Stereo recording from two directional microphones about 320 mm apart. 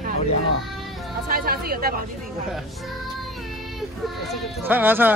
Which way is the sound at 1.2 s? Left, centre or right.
Right.